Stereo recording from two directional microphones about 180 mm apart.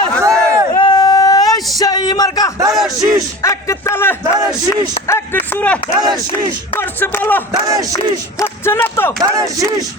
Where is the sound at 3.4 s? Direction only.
15° left (ahead or behind).